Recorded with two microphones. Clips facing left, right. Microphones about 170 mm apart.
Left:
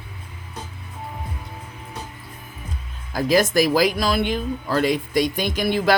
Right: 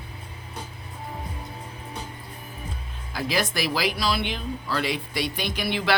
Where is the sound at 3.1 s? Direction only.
45° left (ahead or behind).